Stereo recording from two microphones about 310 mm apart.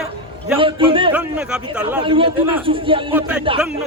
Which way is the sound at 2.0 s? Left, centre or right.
Centre.